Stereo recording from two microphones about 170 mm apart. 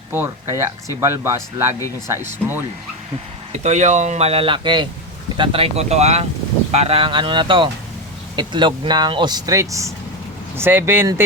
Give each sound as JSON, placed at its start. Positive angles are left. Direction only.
{"t": 0.1, "sound": "speech", "side_deg": -15}
{"t": 3.6, "sound": "speech", "side_deg": -45}